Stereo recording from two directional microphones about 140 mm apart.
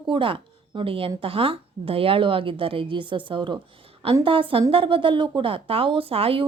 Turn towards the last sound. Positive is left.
turn(degrees=-40)  # may be behind; listen again after turning